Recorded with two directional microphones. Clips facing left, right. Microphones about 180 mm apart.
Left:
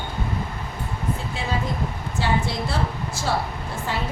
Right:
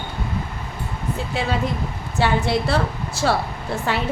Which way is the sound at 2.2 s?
70° right (ahead or behind).